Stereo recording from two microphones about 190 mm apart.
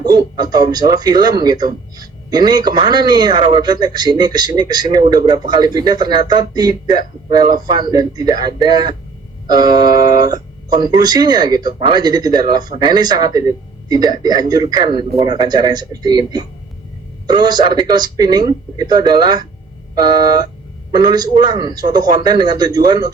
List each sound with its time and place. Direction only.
0.0 s speech: 20° right (ahead or behind)